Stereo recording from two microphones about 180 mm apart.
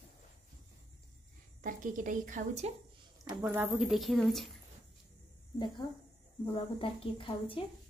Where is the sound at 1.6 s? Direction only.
45° right (ahead or behind).